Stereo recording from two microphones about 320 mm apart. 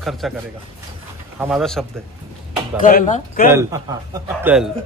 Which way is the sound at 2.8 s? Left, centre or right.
Left.